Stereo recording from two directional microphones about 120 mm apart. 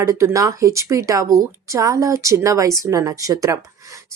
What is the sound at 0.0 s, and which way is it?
Speech, 20° right (ahead or behind).